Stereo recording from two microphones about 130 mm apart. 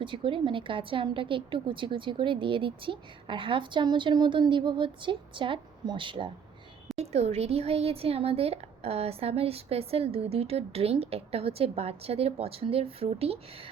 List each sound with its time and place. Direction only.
0.0 s a woman's voice: 40° right (ahead or behind)
6.9 s a woman's voice: 55° right (ahead or behind)